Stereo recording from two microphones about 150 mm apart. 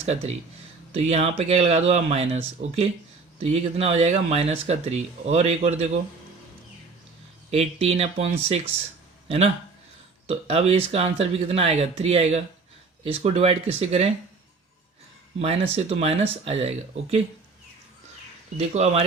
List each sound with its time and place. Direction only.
0.0 s speech: 45° right (ahead or behind)
7.5 s speech: 45° right (ahead or behind)
10.2 s speech: 45° right (ahead or behind)
15.4 s speech: 40° right (ahead or behind)
18.5 s speech: 45° right (ahead or behind)